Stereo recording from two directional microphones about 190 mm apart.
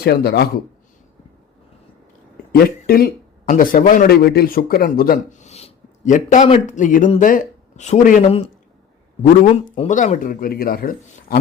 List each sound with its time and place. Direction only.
0.0 s speech: 55° left (ahead or behind)
2.5 s a man's voice: 50° left (ahead or behind)
8.2 s speech: 30° left (ahead or behind)
9.5 s speech: 35° left (ahead or behind); by 11.3 s 50° left (ahead or behind)